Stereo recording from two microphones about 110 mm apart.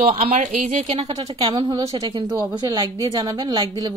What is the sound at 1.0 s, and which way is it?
Speech, 35° right (ahead or behind).